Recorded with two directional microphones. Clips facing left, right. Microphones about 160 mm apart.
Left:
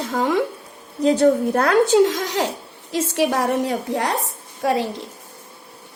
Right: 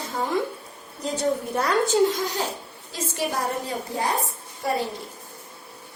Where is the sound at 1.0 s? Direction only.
65° left (ahead or behind).